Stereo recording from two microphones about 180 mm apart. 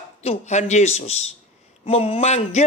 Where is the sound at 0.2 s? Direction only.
40° left (ahead or behind).